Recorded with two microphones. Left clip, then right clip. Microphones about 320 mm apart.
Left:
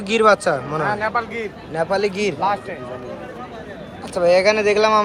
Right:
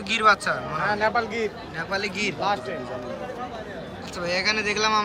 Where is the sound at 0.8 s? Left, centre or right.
Centre.